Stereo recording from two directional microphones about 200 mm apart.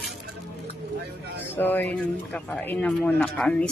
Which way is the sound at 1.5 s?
10° left (ahead or behind).